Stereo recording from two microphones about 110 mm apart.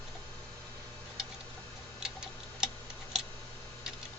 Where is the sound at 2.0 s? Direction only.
5° right (ahead or behind).